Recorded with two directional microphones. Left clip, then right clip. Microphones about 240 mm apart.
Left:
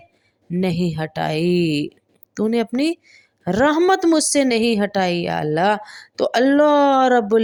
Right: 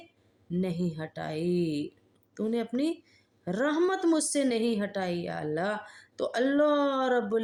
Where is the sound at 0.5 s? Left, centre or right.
Left.